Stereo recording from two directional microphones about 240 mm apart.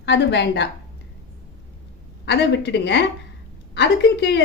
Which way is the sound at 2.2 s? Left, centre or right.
Left.